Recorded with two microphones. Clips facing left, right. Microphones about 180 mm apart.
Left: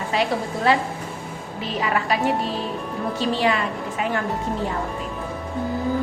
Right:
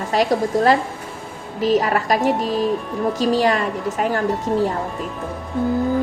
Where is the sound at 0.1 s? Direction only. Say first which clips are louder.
Right 6 dB; 40° right (ahead or behind).